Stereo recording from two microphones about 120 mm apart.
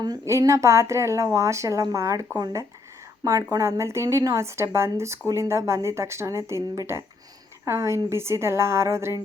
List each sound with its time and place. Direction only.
0.0 s speech: 30° right (ahead or behind)